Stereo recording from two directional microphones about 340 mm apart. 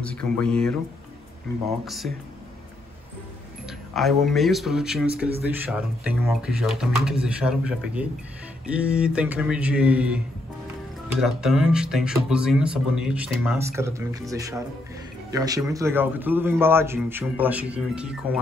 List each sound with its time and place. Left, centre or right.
0.0 s speech: centre
1.9 s speech: centre
3.6 s speech: centre